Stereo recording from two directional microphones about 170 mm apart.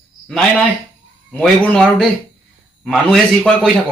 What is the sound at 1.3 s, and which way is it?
Speech, 5° left (ahead or behind).